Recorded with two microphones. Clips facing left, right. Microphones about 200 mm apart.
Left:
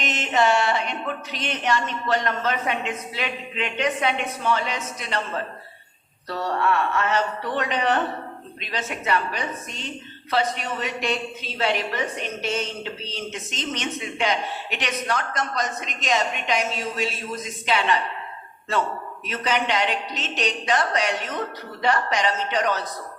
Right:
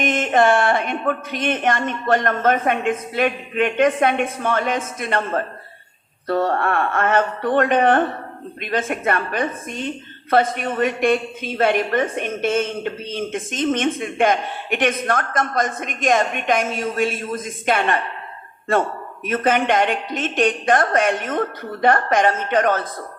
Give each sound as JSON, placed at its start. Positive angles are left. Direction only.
{"t": 0.0, "sound": "a woman's voice", "side_deg": -50}